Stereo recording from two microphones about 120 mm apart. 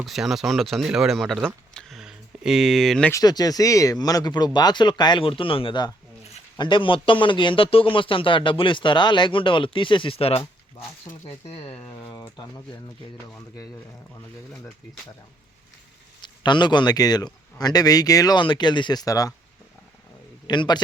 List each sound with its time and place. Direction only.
0.0 s speech: centre (ahead or behind)
1.7 s a sound: 5° left (ahead or behind)
3.1 s a man's voice: 30° left (ahead or behind); by 10.4 s 50° left (ahead or behind)
16.2 s a man's voice: 40° left (ahead or behind)
20.5 s a man's voice: 40° left (ahead or behind)